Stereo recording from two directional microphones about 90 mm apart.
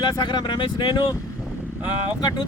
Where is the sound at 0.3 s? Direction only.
60° left (ahead or behind).